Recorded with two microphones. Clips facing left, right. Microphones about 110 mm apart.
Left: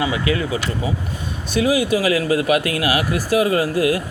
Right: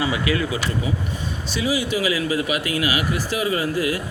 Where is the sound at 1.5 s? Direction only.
50° left (ahead or behind).